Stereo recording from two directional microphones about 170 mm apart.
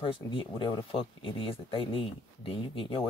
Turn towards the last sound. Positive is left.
turn(degrees=35)  # may be behind; listen again after turning